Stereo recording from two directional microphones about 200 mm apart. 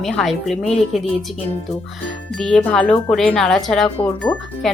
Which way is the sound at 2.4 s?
5° left (ahead or behind).